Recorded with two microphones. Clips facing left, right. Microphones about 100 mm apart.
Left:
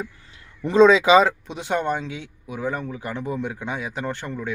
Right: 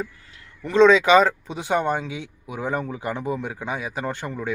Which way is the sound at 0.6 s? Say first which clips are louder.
Left 1 dB; 15° left (ahead or behind).